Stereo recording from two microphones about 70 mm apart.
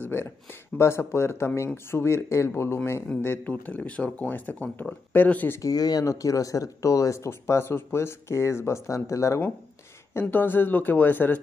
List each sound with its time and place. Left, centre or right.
0.0 s speech: left
5.6 s speech: left
6.0 s speech: left
10.2 s speech: left